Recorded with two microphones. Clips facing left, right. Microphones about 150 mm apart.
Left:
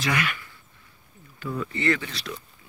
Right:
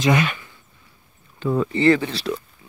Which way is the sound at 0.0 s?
25° right (ahead or behind).